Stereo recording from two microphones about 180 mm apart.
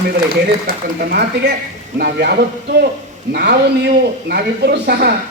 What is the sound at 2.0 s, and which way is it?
Speech, 65° right (ahead or behind).